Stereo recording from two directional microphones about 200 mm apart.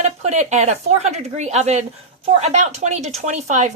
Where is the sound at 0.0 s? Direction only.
35° right (ahead or behind).